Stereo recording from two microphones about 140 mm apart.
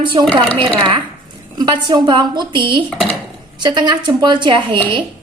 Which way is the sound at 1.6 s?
30° right (ahead or behind).